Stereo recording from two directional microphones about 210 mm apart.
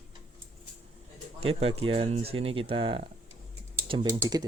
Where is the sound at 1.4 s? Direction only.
25° right (ahead or behind).